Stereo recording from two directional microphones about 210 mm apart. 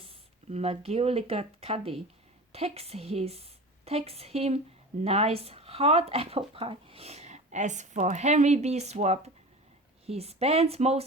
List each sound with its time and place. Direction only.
0.0 s a woman's voice: 30° right (ahead or behind)